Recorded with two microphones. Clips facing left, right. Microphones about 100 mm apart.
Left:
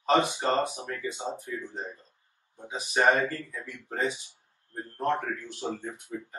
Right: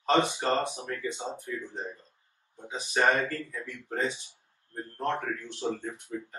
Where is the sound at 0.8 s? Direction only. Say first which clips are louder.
Even; 15° left (ahead or behind).